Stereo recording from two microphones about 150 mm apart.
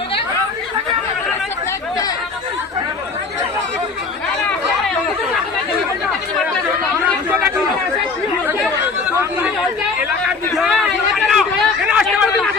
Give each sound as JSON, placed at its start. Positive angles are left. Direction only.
{"t": 10.6, "sound": "chatter", "side_deg": 0}